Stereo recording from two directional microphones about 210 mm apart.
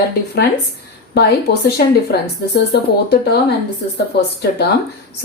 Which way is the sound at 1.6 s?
50° left (ahead or behind).